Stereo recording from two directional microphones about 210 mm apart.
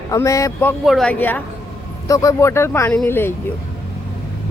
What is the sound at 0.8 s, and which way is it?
A woman's voice, centre (ahead or behind).